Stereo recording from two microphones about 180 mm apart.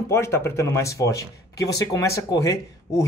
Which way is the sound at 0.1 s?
15° left (ahead or behind).